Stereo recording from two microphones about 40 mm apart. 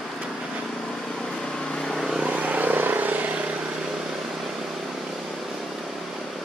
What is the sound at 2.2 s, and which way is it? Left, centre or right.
Vehicle, right.